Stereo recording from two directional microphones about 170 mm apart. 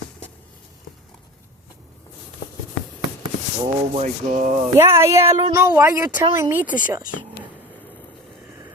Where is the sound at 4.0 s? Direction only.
45° right (ahead or behind).